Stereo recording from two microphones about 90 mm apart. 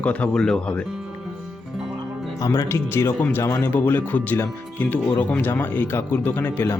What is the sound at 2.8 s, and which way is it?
Speech, 25° left (ahead or behind).